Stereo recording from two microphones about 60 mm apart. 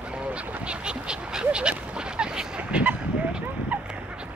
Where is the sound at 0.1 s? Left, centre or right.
Right.